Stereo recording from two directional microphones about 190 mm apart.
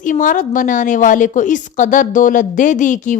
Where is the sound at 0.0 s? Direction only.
40° left (ahead or behind).